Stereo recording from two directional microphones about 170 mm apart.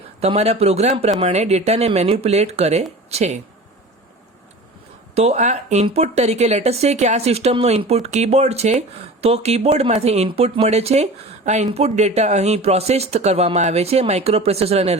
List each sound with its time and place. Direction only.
0.2 s speech: 40° right (ahead or behind)
5.1 s speech: 40° right (ahead or behind)